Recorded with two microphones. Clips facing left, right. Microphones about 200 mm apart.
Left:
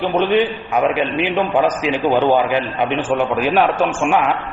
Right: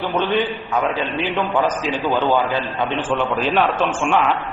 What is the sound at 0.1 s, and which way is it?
A man's voice, 10° left (ahead or behind).